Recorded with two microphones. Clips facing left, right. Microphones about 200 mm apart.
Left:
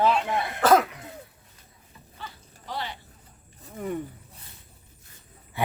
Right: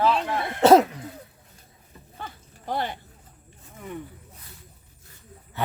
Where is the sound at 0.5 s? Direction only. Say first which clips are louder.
Right 5 dB; 25° right (ahead or behind).